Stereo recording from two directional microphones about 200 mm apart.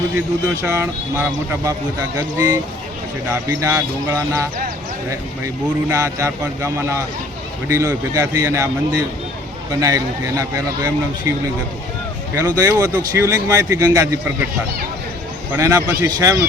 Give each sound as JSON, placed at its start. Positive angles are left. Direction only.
{"t": 0.6, "sound": "speech", "side_deg": -10}
{"t": 5.9, "sound": "speech", "side_deg": -15}
{"t": 15.5, "sound": "speech", "side_deg": -15}